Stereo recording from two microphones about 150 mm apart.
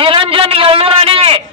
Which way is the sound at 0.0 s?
35° right (ahead or behind).